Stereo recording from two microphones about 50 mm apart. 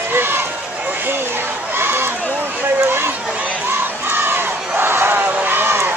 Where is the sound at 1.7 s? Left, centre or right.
Right.